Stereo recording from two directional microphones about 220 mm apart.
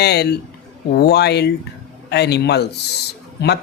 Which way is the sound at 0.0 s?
50° left (ahead or behind).